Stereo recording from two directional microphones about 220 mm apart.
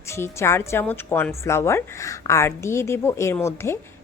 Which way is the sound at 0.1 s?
10° left (ahead or behind).